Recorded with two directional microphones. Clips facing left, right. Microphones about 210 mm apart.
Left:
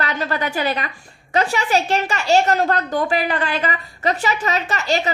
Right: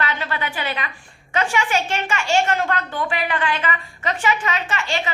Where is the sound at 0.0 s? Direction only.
40° left (ahead or behind).